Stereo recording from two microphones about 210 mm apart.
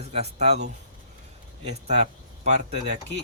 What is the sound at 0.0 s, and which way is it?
Speech, 30° right (ahead or behind).